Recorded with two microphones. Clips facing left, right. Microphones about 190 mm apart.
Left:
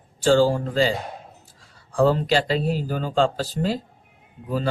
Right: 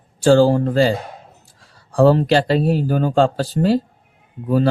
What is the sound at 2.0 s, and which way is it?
Speech, 50° right (ahead or behind).